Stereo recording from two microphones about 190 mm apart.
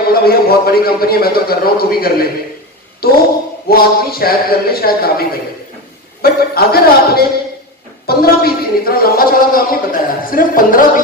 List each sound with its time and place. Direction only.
0.1 s speech: 55° left (ahead or behind)
6.2 s speech: 55° left (ahead or behind)